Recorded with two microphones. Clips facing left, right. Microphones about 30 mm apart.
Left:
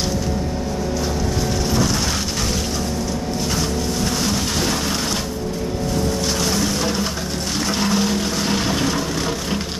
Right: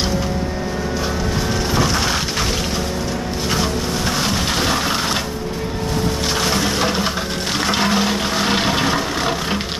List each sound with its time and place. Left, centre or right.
4.2 s a sound: right
6.4 s music: right
7.6 s vehicle: right